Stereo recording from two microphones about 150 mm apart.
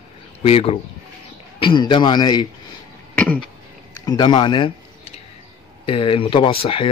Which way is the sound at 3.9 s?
25° left (ahead or behind).